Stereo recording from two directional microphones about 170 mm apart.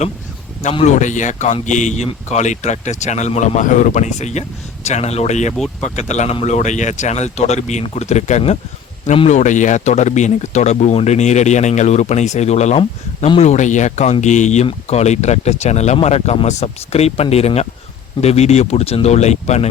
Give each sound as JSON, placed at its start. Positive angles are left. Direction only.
{"t": 0.7, "sound": "a man's voice", "side_deg": 40}
{"t": 5.5, "sound": "speech", "side_deg": 0}
{"t": 6.0, "sound": "a man's voice", "side_deg": 40}